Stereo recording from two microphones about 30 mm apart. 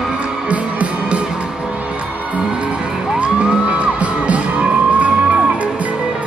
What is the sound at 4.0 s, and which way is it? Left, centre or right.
Music, right.